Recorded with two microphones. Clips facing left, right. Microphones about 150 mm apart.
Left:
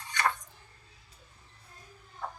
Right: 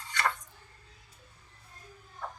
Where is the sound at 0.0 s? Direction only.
20° left (ahead or behind).